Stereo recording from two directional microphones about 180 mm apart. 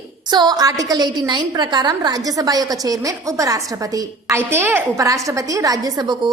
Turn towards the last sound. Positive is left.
turn(degrees=-20)  # may be behind; listen again after turning